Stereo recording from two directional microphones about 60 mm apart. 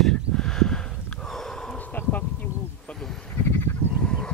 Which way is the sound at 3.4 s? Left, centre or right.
Left.